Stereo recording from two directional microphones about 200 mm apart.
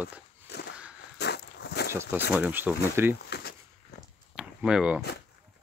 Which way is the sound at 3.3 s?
55° left (ahead or behind).